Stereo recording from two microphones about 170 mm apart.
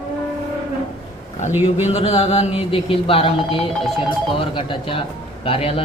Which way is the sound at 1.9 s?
40° left (ahead or behind).